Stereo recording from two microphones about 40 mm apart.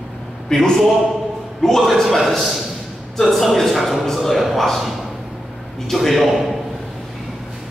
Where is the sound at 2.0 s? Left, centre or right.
Centre.